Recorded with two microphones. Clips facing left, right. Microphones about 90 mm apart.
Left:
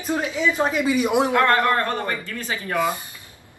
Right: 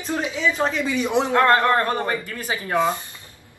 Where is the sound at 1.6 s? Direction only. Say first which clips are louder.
Right 2 dB; 15° right (ahead or behind).